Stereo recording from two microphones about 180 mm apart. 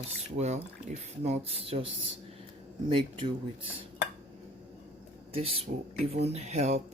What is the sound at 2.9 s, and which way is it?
Speech, 30° right (ahead or behind).